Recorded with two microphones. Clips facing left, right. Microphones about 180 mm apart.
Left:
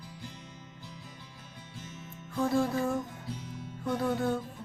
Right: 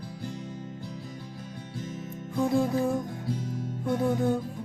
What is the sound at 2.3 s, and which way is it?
Music, 15° right (ahead or behind).